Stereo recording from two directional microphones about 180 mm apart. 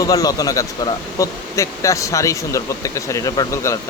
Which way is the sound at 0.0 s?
20° left (ahead or behind).